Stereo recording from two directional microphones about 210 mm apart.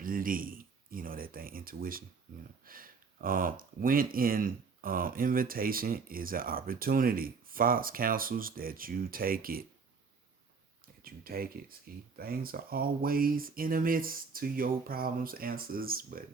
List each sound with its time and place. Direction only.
0.0 s a sound: 40° right (ahead or behind)
2.3 s speech: 40° right (ahead or behind)
11.0 s speech: 45° right (ahead or behind)